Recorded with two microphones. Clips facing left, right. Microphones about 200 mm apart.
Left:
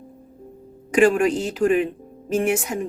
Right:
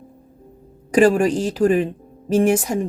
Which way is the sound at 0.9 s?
35° right (ahead or behind).